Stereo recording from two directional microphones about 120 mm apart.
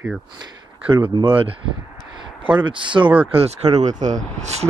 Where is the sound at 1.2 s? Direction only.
50° right (ahead or behind).